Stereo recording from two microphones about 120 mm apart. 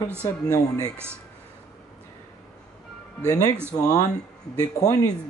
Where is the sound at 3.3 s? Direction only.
30° left (ahead or behind).